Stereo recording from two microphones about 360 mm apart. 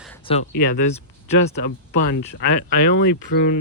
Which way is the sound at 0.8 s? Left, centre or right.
Left.